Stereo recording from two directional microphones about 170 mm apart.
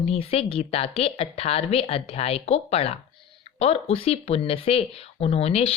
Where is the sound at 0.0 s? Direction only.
35° left (ahead or behind).